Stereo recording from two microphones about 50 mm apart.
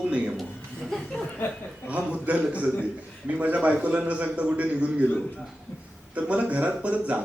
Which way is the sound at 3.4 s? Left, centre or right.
Right.